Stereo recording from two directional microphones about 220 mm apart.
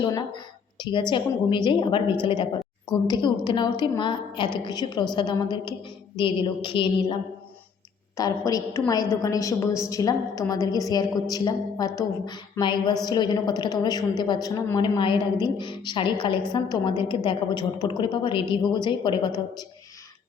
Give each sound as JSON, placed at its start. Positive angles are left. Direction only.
{"t": 0.0, "sound": "a woman's voice", "side_deg": 20}